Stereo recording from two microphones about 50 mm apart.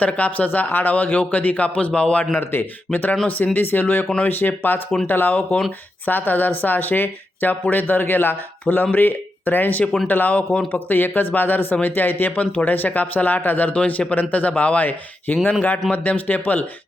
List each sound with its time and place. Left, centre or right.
0.0 s a man's voice: left
2.3 s speech: left
2.9 s speech: left